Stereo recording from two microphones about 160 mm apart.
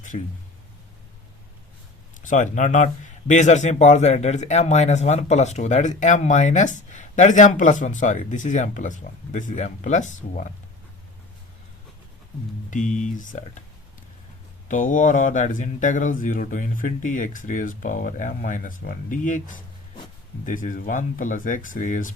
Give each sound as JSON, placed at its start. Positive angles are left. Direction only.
{"t": 0.1, "sound": "speech", "side_deg": 45}
{"t": 2.2, "sound": "speech", "side_deg": 50}
{"t": 12.7, "sound": "speech", "side_deg": 50}
{"t": 14.7, "sound": "speech", "side_deg": 55}